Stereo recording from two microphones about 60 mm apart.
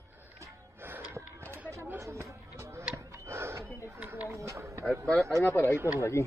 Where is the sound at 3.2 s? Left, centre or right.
Right.